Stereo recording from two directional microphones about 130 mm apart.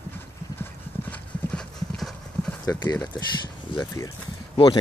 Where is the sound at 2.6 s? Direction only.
30° left (ahead or behind).